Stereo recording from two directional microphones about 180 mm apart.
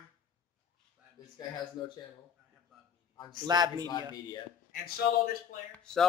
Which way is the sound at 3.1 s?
25° left (ahead or behind).